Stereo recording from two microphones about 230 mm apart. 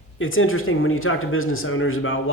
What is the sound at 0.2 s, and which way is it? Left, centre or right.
Speech, left.